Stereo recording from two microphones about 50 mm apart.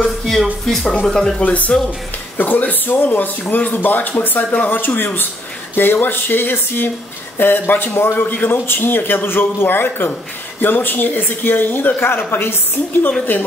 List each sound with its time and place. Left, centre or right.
0.4 s speech: centre
1.4 s a man's voice: left